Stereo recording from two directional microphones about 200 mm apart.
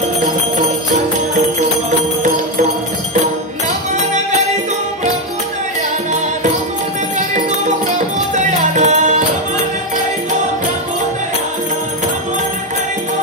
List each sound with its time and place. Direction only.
7.2 s music: 40° right (ahead or behind)
8.7 s music: 35° right (ahead or behind)